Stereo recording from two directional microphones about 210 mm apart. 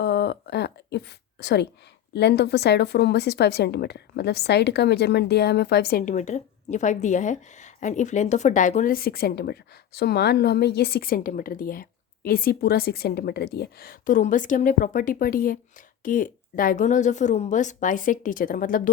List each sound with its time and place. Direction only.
0.0 s a woman's voice: 50° left (ahead or behind)